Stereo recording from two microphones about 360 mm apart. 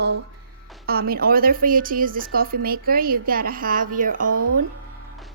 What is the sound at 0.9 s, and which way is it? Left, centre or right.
A woman's voice, right.